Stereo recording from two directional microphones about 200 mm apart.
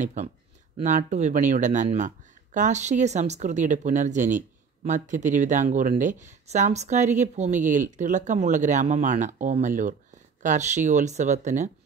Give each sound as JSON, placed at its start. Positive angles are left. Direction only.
{"t": 0.0, "sound": "speech", "side_deg": -40}